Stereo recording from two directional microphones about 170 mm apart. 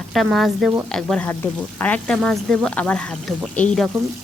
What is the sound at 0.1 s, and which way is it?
Speech, centre (ahead or behind).